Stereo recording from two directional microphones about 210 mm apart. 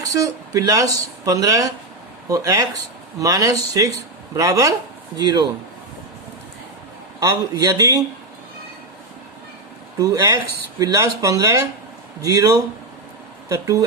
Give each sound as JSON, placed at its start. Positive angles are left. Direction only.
{"t": 0.0, "sound": "speech", "side_deg": -15}
{"t": 7.2, "sound": "speech", "side_deg": -15}
{"t": 10.0, "sound": "speech", "side_deg": -15}